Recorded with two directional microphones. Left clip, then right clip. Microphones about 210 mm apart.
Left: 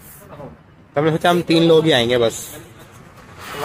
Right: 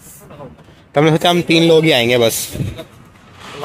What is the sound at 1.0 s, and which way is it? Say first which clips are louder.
A man's voice: right 4 dB; 30° right (ahead or behind).